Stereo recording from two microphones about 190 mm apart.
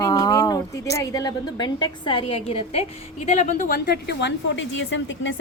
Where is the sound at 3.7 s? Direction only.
55° left (ahead or behind); by 5.4 s 75° left (ahead or behind).